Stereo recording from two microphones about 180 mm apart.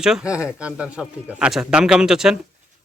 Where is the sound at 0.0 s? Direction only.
5° right (ahead or behind).